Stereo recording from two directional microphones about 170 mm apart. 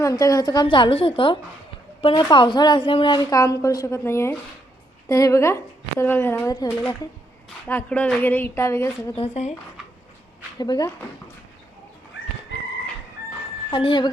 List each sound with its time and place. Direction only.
0.0 s a woman's voice: 20° left (ahead or behind)
9.1 s speech: 40° left (ahead or behind)
10.6 s a woman's voice: 25° left (ahead or behind)
13.7 s speech: 30° left (ahead or behind)